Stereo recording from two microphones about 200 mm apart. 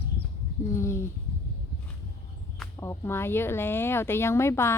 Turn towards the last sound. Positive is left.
turn(degrees=15)  # may be behind; listen again after turning